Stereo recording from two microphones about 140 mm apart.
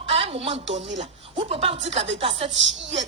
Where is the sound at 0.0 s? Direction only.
45° right (ahead or behind).